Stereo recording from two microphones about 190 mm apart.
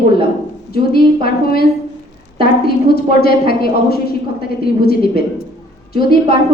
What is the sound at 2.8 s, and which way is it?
A woman's voice, 55° left (ahead or behind).